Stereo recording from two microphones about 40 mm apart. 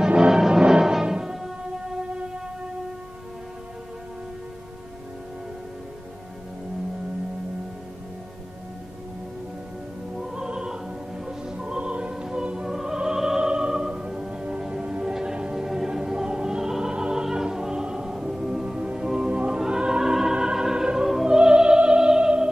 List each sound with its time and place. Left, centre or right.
0.3 s music: centre
10.3 s music: right
12.6 s opera: centre
13.4 s music: right
16.9 s music: right
19.6 s opera: centre
21.4 s opera: right